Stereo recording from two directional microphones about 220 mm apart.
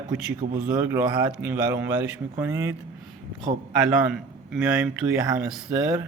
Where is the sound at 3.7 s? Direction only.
Centre (ahead or behind).